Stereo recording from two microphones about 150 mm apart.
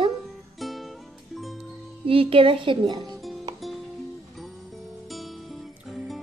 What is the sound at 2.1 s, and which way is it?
Speech, 35° right (ahead or behind).